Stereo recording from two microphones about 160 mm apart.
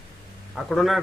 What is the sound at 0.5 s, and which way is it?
Speech, centre (ahead or behind).